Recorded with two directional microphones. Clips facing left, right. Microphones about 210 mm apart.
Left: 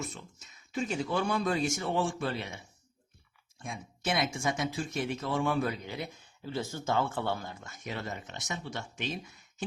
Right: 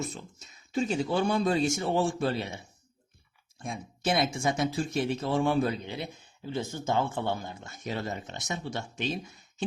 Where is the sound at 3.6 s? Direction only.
35° right (ahead or behind).